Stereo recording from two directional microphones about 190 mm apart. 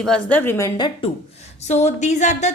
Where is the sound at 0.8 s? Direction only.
25° left (ahead or behind).